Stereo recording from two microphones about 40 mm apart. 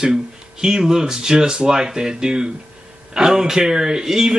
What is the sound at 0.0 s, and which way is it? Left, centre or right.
Speech, centre.